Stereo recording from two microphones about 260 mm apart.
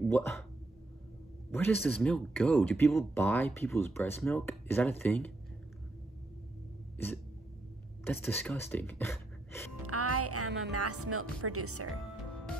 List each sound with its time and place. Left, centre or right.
0.0 s speech: centre
1.5 s speech: centre
8.0 s speech: centre
9.8 s speech: right